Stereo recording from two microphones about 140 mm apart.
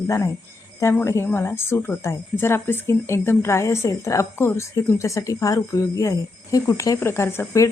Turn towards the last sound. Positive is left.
turn(degrees=20)  # may be behind; listen again after turning